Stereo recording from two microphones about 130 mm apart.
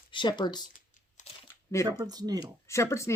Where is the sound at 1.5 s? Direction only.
20° left (ahead or behind).